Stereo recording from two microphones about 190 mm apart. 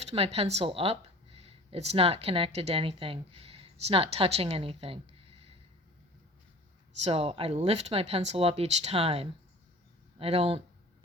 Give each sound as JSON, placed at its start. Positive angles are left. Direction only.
{"t": 0.0, "sound": "speech", "side_deg": -35}
{"t": 7.0, "sound": "speech", "side_deg": -30}